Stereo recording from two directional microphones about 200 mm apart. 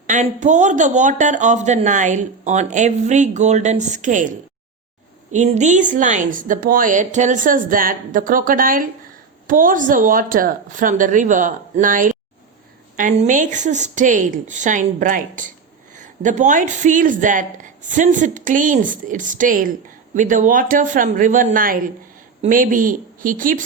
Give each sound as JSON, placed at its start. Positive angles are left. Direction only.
{"t": 0.1, "sound": "a woman's voice", "side_deg": -35}